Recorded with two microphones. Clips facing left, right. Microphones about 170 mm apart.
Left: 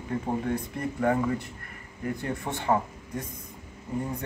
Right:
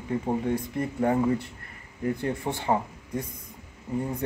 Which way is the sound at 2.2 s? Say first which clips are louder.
Right 2 dB; 20° right (ahead or behind).